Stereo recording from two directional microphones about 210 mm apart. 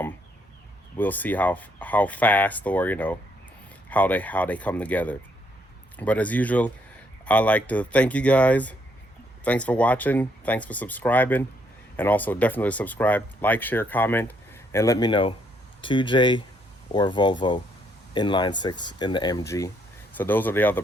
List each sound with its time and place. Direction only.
0.9 s speech: 10° left (ahead or behind)